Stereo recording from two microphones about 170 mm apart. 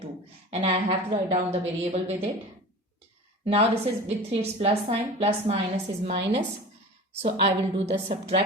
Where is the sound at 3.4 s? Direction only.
35° right (ahead or behind).